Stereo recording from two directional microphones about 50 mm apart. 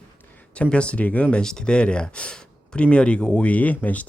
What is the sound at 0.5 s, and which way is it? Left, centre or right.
Speech, left.